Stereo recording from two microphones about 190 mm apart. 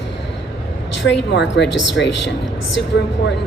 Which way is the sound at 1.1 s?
65° left (ahead or behind).